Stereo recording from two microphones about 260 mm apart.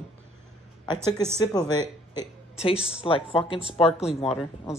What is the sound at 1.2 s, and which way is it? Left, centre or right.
Speech, centre.